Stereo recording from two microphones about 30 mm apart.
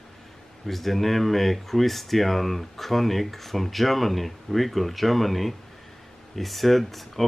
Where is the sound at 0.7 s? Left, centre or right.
Centre.